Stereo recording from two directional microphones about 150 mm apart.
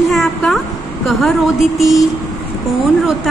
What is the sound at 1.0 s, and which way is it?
A woman's voice, centre (ahead or behind).